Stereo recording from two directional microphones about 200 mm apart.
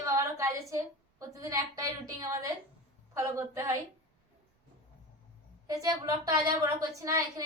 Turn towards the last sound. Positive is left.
turn(degrees=-15)  # may be behind; listen again after turning